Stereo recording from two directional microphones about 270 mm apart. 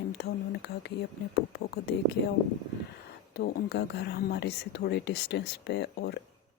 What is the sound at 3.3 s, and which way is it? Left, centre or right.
Speech, left.